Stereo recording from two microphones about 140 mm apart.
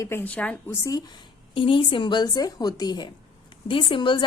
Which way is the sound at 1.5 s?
40° left (ahead or behind).